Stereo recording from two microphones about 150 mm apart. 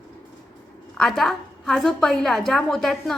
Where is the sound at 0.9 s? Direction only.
Centre (ahead or behind).